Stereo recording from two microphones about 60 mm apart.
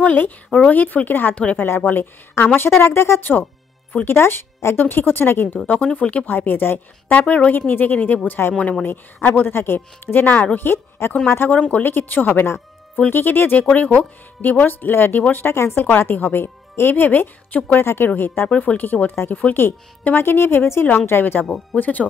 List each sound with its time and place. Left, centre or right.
0.0 s a woman's voice: left
1.3 s a woman's voice: left
5.9 s a woman's voice: left
12.4 s music: left
13.1 s speech: left
17.8 s speech: left
18.5 s speech: left
20.8 s a woman's voice: left